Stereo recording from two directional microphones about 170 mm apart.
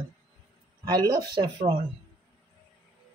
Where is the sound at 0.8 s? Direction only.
25° right (ahead or behind).